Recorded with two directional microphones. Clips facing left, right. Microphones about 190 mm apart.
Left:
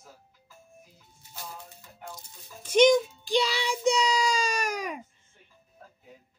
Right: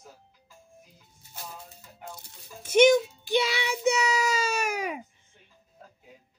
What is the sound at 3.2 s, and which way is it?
Child singing, 55° right (ahead or behind).